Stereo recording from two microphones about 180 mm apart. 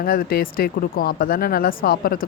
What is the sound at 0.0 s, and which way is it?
Speech, 55° left (ahead or behind).